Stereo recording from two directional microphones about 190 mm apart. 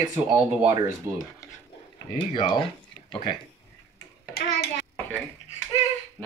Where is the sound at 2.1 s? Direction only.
20° left (ahead or behind).